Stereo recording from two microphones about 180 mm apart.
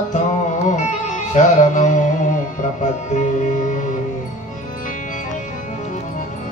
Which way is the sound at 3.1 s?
45° left (ahead or behind).